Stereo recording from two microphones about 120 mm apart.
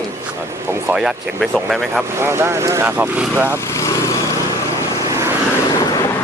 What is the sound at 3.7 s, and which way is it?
Vehicle, 25° left (ahead or behind).